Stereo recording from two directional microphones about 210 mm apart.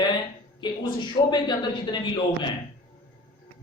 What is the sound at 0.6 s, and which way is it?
A man's voice, 20° left (ahead or behind).